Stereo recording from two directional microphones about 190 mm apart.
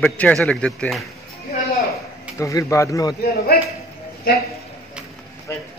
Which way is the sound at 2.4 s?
15° left (ahead or behind).